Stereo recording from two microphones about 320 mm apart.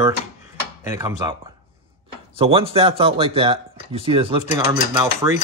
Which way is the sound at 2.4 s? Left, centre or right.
Centre.